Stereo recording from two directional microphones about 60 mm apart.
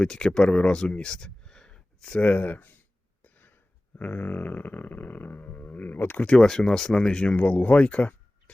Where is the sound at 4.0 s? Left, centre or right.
Left.